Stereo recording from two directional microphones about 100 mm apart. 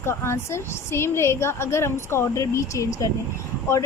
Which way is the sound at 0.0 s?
25° left (ahead or behind).